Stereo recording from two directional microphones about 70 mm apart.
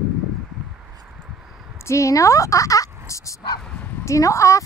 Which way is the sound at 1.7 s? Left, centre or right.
Left.